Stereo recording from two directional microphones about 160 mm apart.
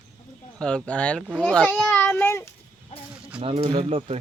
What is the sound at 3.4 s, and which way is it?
Speech, 35° right (ahead or behind).